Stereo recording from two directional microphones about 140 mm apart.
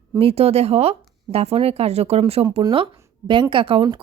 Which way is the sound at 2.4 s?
30° right (ahead or behind).